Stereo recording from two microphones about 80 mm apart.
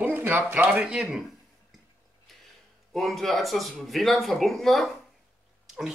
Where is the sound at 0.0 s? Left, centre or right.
Right.